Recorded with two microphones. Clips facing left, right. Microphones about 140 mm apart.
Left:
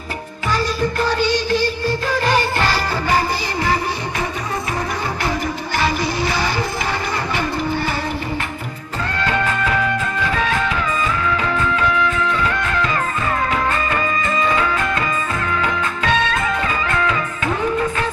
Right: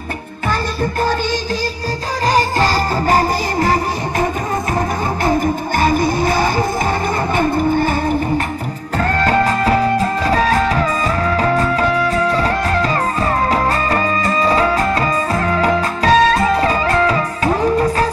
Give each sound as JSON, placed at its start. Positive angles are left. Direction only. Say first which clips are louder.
{"t": 2.2, "sound": "music", "louder": "right 5 dB", "side_deg": -40}
{"t": 5.2, "sound": "music", "louder": "right 6 dB", "side_deg": -45}
{"t": 9.2, "sound": "music", "louder": "right 4 dB", "side_deg": -40}